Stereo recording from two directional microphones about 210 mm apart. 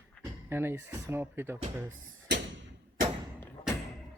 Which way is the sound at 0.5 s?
10° right (ahead or behind).